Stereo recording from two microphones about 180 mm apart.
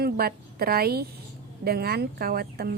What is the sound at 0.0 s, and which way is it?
A woman's voice, 60° right (ahead or behind).